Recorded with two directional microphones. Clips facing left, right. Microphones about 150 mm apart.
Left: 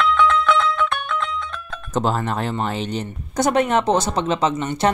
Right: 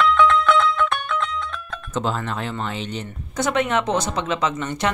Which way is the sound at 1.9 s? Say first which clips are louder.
Left 4 dB; 40° left (ahead or behind).